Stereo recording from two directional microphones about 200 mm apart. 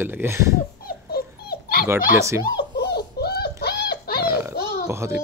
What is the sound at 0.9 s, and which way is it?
Dog, 50° left (ahead or behind).